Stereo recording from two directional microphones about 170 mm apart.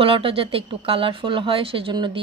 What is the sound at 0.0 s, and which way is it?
Speech, 30° right (ahead or behind).